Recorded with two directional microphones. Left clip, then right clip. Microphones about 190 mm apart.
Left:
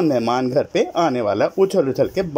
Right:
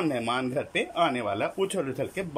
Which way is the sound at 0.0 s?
20° left (ahead or behind).